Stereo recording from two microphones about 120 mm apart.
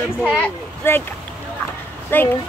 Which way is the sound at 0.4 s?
15° left (ahead or behind).